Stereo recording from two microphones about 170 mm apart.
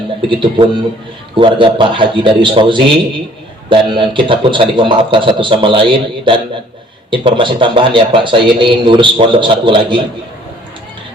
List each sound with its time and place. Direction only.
0.3 s a man's voice: 30° right (ahead or behind)